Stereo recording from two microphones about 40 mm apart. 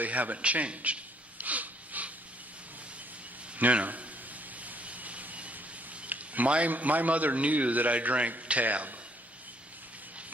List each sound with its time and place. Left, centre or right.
0.0 s a man's voice: right
1.4 s snort: right
3.6 s a man's voice: right
4.6 s vehicle: right
6.0 s a man's voice: right